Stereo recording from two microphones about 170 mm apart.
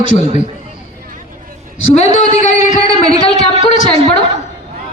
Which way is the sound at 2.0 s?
40° left (ahead or behind).